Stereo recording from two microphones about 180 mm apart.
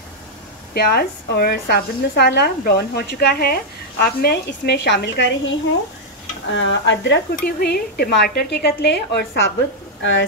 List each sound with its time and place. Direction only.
0.7 s speech: 60° left (ahead or behind); by 5.5 s 80° left
6.5 s speech: 90° left; by 9.4 s 65° left (ahead or behind)